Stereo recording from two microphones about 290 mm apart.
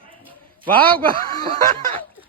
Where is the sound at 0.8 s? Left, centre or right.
Centre.